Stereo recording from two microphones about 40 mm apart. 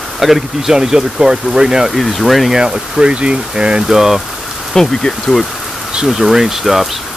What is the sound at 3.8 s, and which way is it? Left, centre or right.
Speech, centre.